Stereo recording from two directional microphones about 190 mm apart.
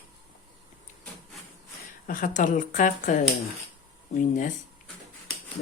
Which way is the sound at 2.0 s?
45° left (ahead or behind).